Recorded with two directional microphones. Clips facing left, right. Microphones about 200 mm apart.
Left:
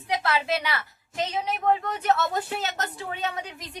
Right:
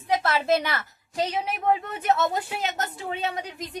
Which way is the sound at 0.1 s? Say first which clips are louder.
Right 3 dB; 45° right (ahead or behind).